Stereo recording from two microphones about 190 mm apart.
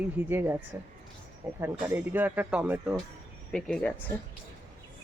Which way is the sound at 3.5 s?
5° left (ahead or behind).